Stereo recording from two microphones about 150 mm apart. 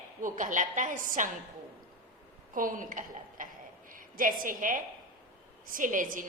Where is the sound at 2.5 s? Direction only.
65° right (ahead or behind).